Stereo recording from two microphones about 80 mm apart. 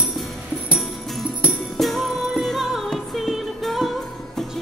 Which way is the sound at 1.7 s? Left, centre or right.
Centre.